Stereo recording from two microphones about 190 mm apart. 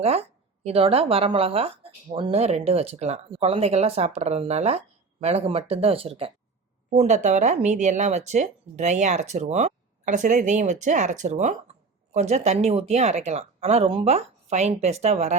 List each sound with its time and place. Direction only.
0.0 s speech: 35° right (ahead or behind)